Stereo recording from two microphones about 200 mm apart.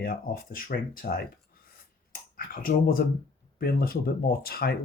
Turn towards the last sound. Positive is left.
turn(degrees=50)  # may be behind; listen again after turning